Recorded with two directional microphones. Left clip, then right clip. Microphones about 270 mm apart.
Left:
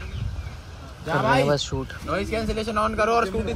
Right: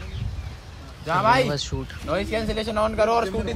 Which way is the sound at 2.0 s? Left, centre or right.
Right.